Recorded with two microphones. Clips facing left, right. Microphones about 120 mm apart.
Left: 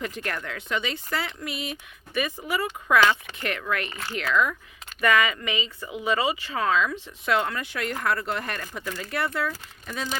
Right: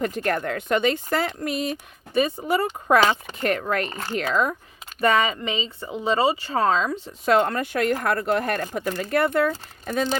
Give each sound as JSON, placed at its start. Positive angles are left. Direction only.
{"t": 0.0, "sound": "speech", "side_deg": -45}